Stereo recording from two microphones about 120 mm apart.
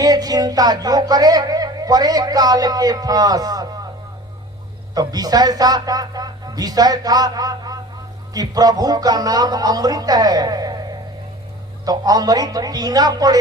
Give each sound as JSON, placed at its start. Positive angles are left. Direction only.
{"t": 0.0, "sound": "speech", "side_deg": -30}
{"t": 4.9, "sound": "speech", "side_deg": -30}